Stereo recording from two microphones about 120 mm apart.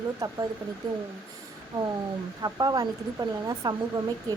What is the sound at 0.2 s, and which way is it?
Speech, 30° right (ahead or behind).